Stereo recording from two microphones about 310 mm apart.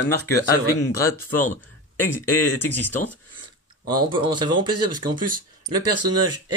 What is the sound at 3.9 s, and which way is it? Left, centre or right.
Speech, centre.